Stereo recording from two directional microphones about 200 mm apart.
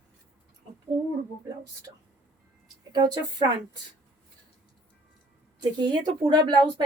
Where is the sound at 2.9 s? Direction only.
20° right (ahead or behind).